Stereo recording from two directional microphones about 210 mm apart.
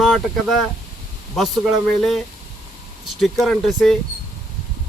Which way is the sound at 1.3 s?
Centre (ahead or behind).